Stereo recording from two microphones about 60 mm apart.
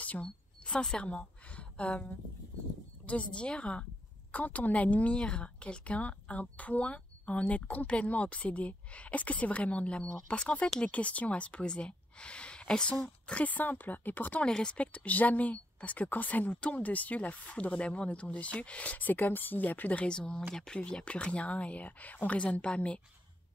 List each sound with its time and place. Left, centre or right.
0.0 s a sound: left
3.1 s a woman's voice: centre
13.3 s a woman's voice: left
14.4 s a woman's voice: centre
20.1 s a woman's voice: centre